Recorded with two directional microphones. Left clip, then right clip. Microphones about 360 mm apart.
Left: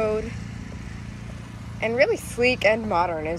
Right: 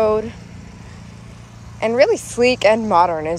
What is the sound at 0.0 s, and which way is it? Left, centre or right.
Vehicle, centre.